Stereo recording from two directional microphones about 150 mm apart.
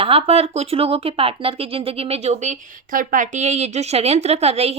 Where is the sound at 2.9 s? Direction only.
60° right (ahead or behind); by 4.7 s 45° right (ahead or behind).